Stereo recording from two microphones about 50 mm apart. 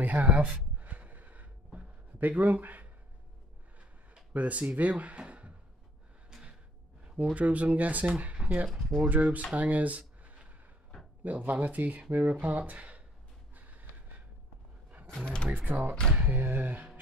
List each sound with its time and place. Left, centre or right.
0.0 s speech: right
0.7 s a sound: right
4.3 s speech: right
7.3 s speech: right
8.6 s speech: centre
9.0 s speech: right
9.6 s a sound: right
11.2 s speech: right
13.6 s gasp: right
15.2 s speech: centre
15.5 s speech: right